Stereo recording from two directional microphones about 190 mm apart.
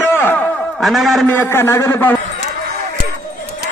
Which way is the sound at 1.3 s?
10° left (ahead or behind).